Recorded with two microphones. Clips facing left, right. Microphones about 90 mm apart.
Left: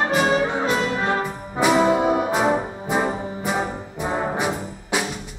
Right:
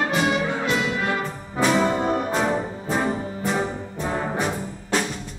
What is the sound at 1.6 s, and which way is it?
Brass instrument, 10° left (ahead or behind).